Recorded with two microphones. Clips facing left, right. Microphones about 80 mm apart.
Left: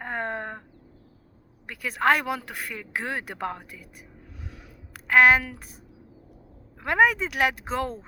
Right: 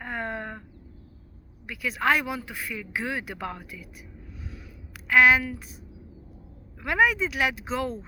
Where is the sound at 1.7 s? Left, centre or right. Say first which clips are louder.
Left 2 dB; left.